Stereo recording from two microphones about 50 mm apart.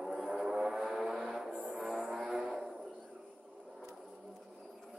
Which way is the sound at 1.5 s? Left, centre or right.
Right.